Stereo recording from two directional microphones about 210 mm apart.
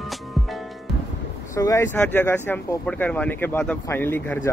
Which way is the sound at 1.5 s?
15° left (ahead or behind).